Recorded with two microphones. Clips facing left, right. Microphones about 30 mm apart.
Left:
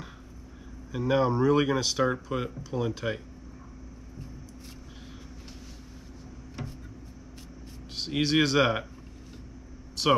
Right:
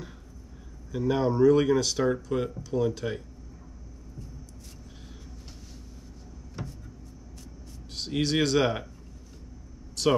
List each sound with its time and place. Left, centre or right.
0.9 s speech: centre
7.9 s speech: centre
10.0 s speech: centre